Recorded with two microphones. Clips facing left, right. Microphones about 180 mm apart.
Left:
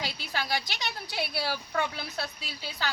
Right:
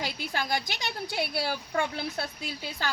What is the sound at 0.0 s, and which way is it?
A woman's voice, 45° right (ahead or behind).